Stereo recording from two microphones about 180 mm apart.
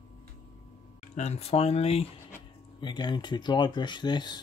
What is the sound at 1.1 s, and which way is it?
Speech, 35° left (ahead or behind).